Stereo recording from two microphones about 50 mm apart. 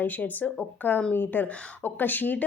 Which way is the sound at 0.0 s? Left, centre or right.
Left.